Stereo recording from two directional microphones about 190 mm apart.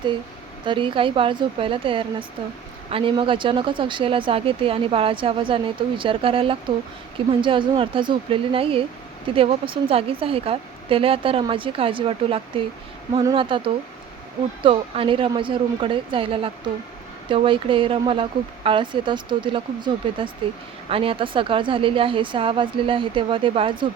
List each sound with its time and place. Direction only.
0.6 s speech: 25° right (ahead or behind)
14.6 s speech: 30° right (ahead or behind)